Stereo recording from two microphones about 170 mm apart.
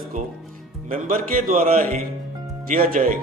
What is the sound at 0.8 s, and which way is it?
Speech, 50° right (ahead or behind).